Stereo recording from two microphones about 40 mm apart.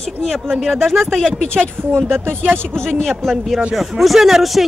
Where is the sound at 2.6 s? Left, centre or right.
Centre.